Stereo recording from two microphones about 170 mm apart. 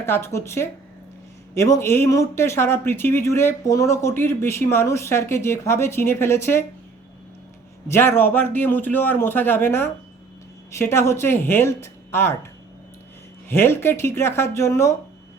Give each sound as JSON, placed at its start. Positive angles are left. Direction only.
{"t": 0.0, "sound": "speech", "side_deg": 15}
{"t": 7.9, "sound": "speech", "side_deg": 15}
{"t": 13.5, "sound": "speech", "side_deg": 15}